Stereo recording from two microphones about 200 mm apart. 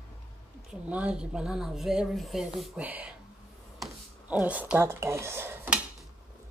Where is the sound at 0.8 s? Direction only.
5° right (ahead or behind).